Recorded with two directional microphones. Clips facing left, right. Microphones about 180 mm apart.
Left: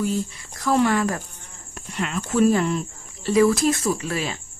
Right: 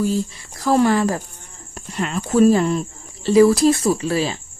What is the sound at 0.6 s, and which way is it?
Speech, 35° right (ahead or behind).